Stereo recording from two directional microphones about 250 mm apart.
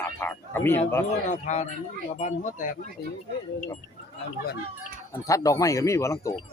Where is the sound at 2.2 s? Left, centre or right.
Left.